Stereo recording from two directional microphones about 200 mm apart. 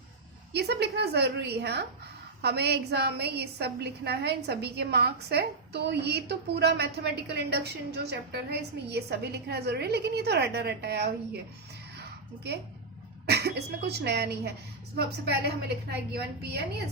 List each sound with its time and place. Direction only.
0.5 s a woman's voice: 55° right (ahead or behind)
11.9 s a sound: 55° right (ahead or behind)
13.2 s a woman's voice: 55° right (ahead or behind)